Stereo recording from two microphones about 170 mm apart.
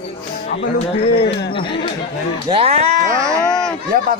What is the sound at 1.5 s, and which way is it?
Speech, 30° left (ahead or behind).